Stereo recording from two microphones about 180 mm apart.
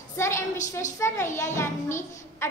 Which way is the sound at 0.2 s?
15° left (ahead or behind).